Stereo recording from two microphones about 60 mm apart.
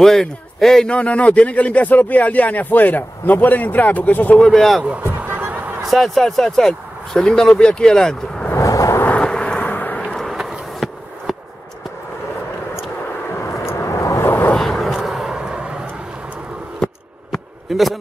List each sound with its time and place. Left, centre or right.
0.0 s speech: centre
0.9 s speech: left
4.4 s speech: centre
5.1 s a sound: right
5.8 s speech: centre
8.5 s vehicle: left
9.2 s vehicle: centre
9.7 s a sound: left
9.9 s vehicle: centre
10.8 s a sound: centre
13.4 s vehicle: left
14.2 s vehicle: left
14.6 s vehicle: centre
17.6 s speech: centre